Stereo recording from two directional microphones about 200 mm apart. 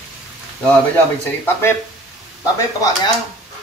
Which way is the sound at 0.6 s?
10° left (ahead or behind).